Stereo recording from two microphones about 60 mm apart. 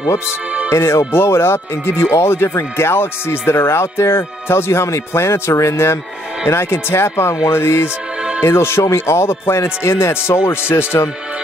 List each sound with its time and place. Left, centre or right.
0.7 s speech: left